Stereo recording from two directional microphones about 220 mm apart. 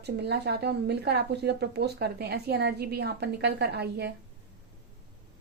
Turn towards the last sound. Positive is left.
turn(degrees=-50)  # may be behind; listen again after turning